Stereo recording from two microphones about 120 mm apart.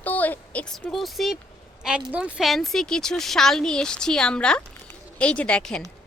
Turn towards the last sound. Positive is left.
turn(degrees=5)  # may be behind; listen again after turning